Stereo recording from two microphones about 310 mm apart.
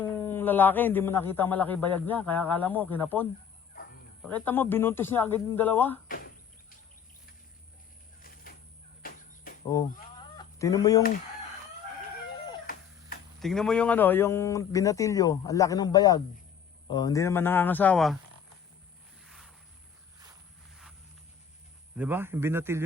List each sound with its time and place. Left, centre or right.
0.2 s a man's voice: centre
9.0 s a sound: left
10.3 s chicken: centre
13.4 s speech: centre
19.2 s vehicle: centre
21.9 s speech: centre